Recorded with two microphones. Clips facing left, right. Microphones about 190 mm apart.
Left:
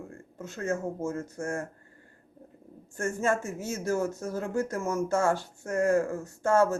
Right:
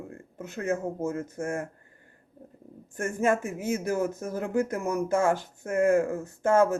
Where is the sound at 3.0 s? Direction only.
15° right (ahead or behind).